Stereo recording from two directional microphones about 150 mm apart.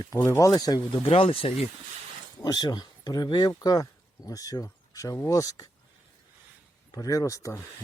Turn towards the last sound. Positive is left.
turn(degrees=20)  # may be behind; listen again after turning